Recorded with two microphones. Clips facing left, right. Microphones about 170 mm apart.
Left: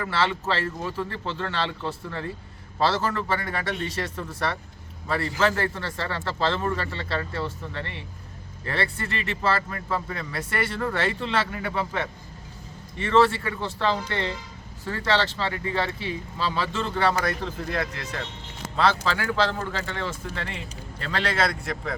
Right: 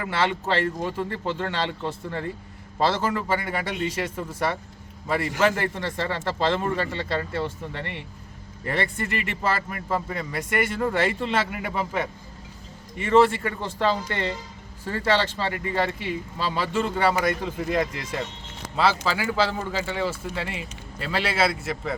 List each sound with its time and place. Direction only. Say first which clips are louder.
0.8 s speech: right 2 dB; 15° right (ahead or behind)